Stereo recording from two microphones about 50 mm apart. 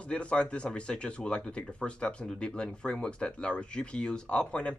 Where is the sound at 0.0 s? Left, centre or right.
Left.